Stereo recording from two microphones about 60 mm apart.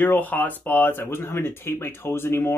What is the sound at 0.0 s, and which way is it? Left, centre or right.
Speech, left.